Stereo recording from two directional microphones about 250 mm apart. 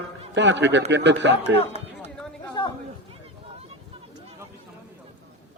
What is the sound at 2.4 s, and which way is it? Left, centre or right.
Chatter, centre.